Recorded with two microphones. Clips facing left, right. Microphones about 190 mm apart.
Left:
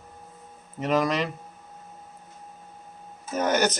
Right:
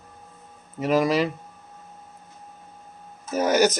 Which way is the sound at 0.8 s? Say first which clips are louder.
Right 3 dB; 5° right (ahead or behind).